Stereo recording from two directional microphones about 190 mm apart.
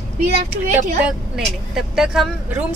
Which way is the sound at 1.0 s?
Centre (ahead or behind).